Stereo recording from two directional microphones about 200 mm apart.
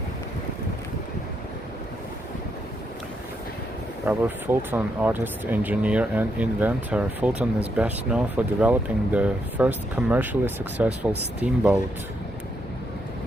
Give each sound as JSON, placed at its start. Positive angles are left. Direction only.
{"t": 4.0, "sound": "speech", "side_deg": -10}